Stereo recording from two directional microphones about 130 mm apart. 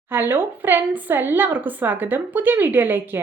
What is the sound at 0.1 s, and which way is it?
A woman's voice, 15° right (ahead or behind).